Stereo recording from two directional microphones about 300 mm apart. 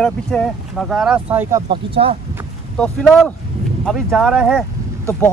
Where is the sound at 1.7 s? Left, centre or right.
Centre.